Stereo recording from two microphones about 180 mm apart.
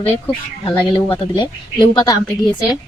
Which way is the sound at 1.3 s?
25° left (ahead or behind).